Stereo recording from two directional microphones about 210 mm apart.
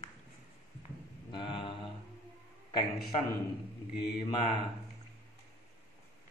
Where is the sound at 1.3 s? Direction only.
25° left (ahead or behind).